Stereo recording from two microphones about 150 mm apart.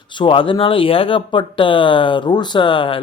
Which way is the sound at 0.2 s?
35° left (ahead or behind).